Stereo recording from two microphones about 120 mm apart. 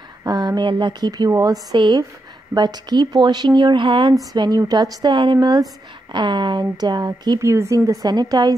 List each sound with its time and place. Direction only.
0.2 s speech: 30° right (ahead or behind)
4.1 s speech: 30° right (ahead or behind)